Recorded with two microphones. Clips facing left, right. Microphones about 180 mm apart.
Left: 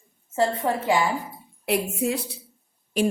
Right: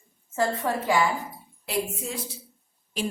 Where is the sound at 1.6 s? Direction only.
60° left (ahead or behind).